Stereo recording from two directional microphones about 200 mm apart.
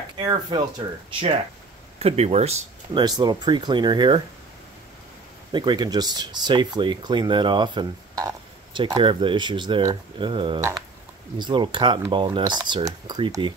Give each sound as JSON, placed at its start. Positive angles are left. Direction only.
{"t": 0.2, "sound": "speech", "side_deg": -20}
{"t": 5.5, "sound": "speech", "side_deg": -20}